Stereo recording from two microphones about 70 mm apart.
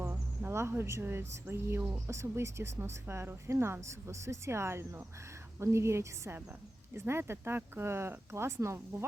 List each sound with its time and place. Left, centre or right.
0.1 s a woman's voice: right